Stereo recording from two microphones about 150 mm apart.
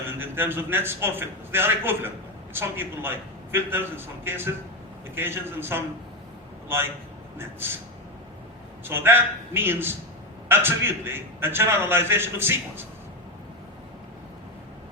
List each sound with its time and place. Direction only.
0.1 s a man's voice: 15° right (ahead or behind)
8.8 s a man's voice: 15° right (ahead or behind)